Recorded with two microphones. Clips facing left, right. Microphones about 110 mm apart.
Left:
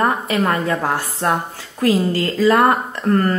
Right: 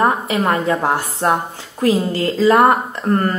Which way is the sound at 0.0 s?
20° right (ahead or behind).